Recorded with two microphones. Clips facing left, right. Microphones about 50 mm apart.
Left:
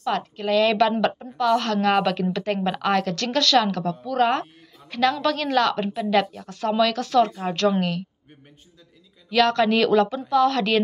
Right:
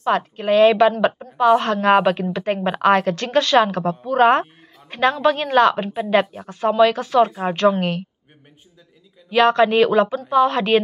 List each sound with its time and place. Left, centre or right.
0.0 s a woman's voice: right
9.3 s a woman's voice: right